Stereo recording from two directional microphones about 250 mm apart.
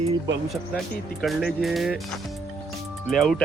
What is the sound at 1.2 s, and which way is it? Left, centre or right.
Speech, centre.